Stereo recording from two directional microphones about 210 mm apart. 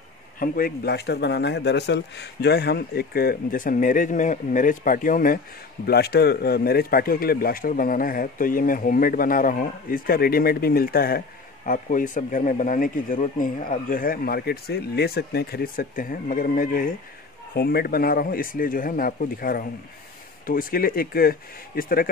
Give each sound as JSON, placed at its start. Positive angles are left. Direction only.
{"t": 0.4, "sound": "a man's voice", "side_deg": 45}